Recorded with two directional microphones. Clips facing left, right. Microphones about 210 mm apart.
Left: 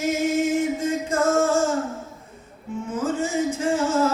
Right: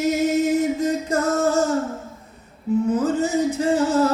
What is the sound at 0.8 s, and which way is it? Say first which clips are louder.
Music: right 2 dB; 40° right (ahead or behind).